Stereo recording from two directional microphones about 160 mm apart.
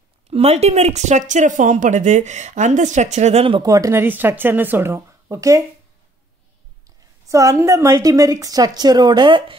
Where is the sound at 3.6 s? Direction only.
20° right (ahead or behind).